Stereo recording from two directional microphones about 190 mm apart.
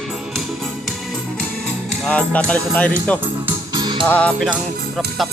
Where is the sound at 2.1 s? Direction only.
5° left (ahead or behind).